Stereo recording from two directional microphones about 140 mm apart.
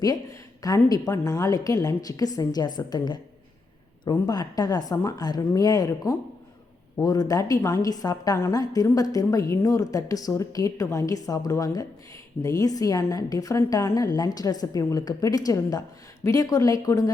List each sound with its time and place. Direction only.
0.0 s a woman's voice: 25° left (ahead or behind)